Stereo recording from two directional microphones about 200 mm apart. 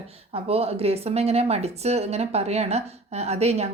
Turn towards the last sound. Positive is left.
turn(degrees=-30)  # may be behind; listen again after turning